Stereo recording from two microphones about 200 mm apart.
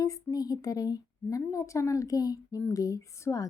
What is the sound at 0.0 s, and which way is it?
Speech, 20° left (ahead or behind).